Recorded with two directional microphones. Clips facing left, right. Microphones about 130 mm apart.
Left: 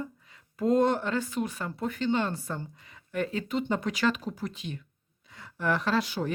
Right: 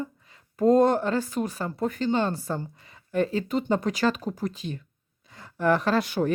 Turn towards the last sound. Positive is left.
turn(degrees=-55)  # may be behind; listen again after turning